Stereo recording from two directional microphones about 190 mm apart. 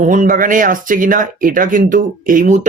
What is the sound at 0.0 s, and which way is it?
Speech, 45° right (ahead or behind).